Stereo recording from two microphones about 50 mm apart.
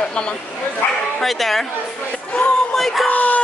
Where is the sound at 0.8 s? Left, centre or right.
Left.